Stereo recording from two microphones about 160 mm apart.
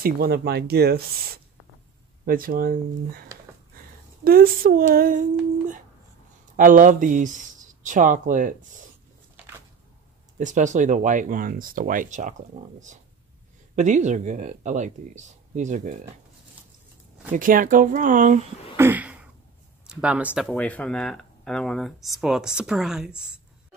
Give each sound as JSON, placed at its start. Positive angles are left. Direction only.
{"t": 0.0, "sound": "speech", "side_deg": -70}
{"t": 2.2, "sound": "speech", "side_deg": -65}
{"t": 6.5, "sound": "speech", "side_deg": -55}
{"t": 10.4, "sound": "speech", "side_deg": -50}
{"t": 17.3, "sound": "speech", "side_deg": -60}
{"t": 18.8, "sound": "a sound", "side_deg": -10}
{"t": 19.9, "sound": "speech", "side_deg": -5}
{"t": 20.5, "sound": "speech", "side_deg": 10}